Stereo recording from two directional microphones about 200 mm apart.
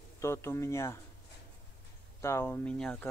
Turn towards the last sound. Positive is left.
turn(degrees=5)  # may be behind; listen again after turning